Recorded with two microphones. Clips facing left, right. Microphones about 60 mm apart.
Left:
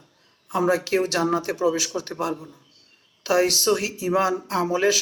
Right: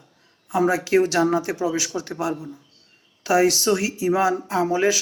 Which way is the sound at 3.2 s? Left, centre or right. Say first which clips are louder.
Right 2 dB; centre.